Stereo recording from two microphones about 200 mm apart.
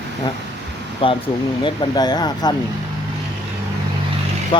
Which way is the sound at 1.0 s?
25° left (ahead or behind).